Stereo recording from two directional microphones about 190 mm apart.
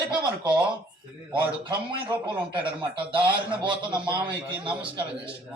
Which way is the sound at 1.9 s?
25° right (ahead or behind).